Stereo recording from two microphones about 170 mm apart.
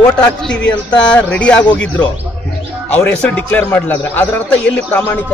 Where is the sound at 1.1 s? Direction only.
10° left (ahead or behind).